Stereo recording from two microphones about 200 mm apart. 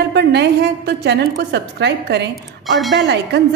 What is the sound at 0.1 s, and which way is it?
A woman's voice, 55° right (ahead or behind).